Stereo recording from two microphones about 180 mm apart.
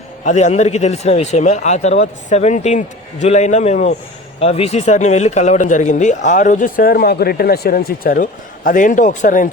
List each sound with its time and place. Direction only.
0.3 s speech: 40° left (ahead or behind)